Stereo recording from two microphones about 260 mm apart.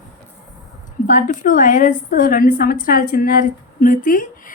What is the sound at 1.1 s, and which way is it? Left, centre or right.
A woman's voice, left.